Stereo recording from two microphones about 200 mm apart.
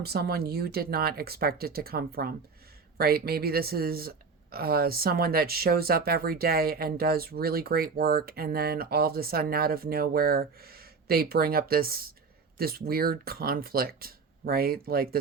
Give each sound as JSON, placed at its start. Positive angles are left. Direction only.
{"t": 0.0, "sound": "speech", "side_deg": -50}